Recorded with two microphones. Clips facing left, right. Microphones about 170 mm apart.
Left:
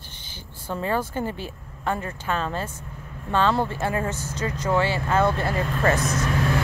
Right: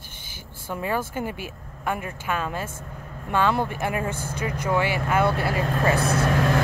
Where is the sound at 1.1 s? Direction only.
10° right (ahead or behind).